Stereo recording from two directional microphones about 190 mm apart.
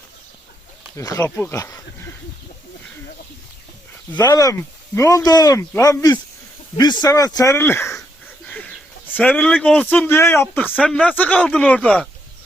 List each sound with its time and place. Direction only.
0.9 s speech: 15° left (ahead or behind)
4.2 s speech: 20° left (ahead or behind)